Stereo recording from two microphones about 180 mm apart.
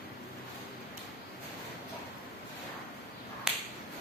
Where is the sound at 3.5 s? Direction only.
5° right (ahead or behind).